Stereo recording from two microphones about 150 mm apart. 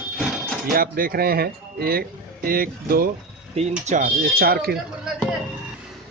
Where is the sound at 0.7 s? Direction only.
75° right (ahead or behind); by 2.0 s 90° right.